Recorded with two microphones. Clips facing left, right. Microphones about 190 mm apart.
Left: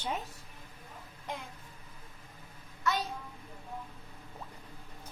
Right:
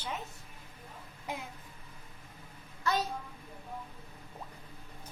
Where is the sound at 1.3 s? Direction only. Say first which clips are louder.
Right 1 dB; 5° right (ahead or behind).